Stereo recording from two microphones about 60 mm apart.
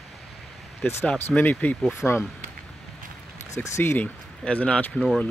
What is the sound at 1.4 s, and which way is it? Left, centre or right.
Speech, left.